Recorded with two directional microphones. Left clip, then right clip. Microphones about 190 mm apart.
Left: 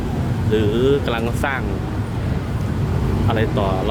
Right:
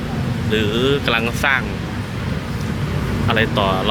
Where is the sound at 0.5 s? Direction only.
15° left (ahead or behind).